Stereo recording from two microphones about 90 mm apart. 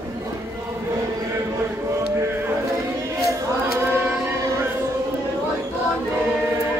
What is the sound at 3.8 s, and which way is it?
Chant, 25° right (ahead or behind).